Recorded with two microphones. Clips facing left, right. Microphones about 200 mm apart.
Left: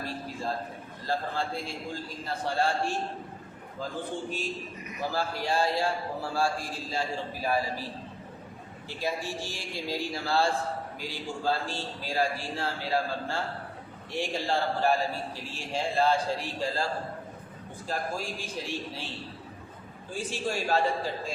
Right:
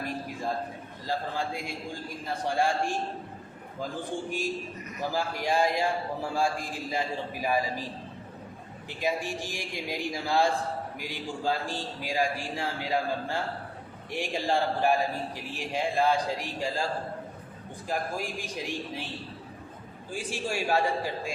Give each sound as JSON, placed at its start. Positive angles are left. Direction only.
{"t": 1.0, "sound": "a man's voice", "side_deg": -15}
{"t": 4.3, "sound": "a man's voice", "side_deg": -15}
{"t": 8.9, "sound": "a man's voice", "side_deg": -15}
{"t": 17.8, "sound": "a man's voice", "side_deg": -15}
{"t": 20.3, "sound": "a man's voice", "side_deg": -10}